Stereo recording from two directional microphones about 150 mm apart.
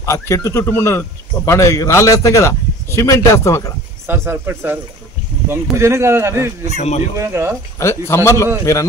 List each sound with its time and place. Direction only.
0.0 s speech: 20° left (ahead or behind)
4.1 s speech: 15° right (ahead or behind)
6.8 s speech: 50° left (ahead or behind)
7.2 s speech: 15° right (ahead or behind)
7.8 s speech: 20° left (ahead or behind)